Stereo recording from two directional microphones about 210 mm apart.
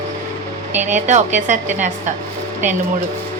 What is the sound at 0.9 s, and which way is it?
A woman's voice, 35° right (ahead or behind).